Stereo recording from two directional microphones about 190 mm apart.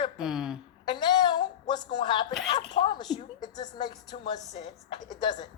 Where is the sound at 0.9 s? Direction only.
20° left (ahead or behind).